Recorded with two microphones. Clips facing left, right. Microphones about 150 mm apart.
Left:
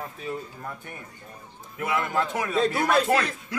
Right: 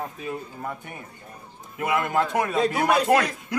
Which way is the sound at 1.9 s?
15° right (ahead or behind).